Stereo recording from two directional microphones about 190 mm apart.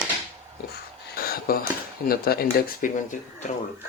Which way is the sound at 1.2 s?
50° left (ahead or behind).